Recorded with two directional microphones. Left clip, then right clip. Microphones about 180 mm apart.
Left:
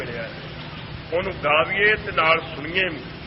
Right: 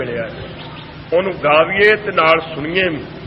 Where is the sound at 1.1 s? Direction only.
35° right (ahead or behind).